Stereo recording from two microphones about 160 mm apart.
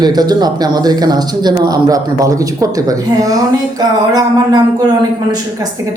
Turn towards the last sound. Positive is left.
turn(degrees=-25)  # may be behind; listen again after turning